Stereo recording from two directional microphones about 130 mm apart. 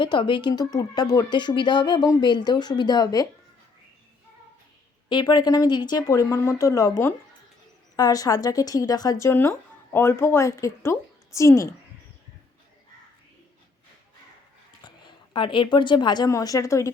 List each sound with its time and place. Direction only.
0.0 s speech: 40° left (ahead or behind)
5.0 s speech: 35° left (ahead or behind)
14.8 s a woman's voice: 40° left (ahead or behind)